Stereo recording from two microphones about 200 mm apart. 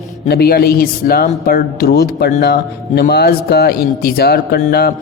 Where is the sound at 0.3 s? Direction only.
50° left (ahead or behind).